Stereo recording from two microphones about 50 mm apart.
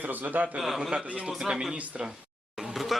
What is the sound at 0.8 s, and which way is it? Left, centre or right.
Speech, centre.